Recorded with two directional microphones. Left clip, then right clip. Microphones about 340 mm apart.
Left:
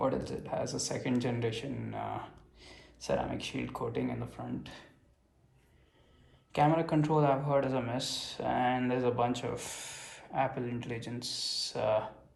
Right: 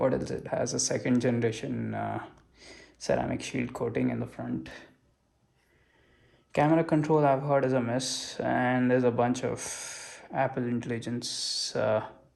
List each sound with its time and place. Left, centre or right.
0.0 s speech: right
6.5 s speech: right